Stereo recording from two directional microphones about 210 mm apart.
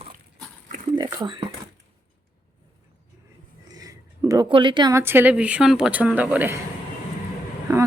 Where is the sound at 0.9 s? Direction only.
20° right (ahead or behind).